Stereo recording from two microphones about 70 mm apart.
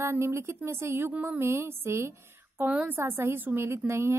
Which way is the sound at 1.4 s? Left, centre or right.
Right.